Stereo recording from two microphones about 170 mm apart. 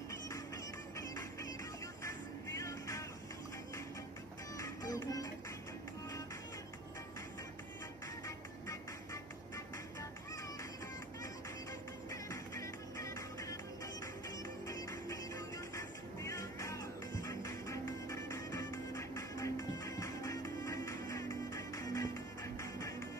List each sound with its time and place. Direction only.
2.0 s music: 15° left (ahead or behind)
4.6 s music: 20° left (ahead or behind)
12.1 s music: 20° left (ahead or behind)
14.7 s music: 20° left (ahead or behind)